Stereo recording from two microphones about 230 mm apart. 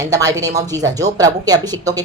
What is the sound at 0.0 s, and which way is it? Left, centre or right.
Speech, centre.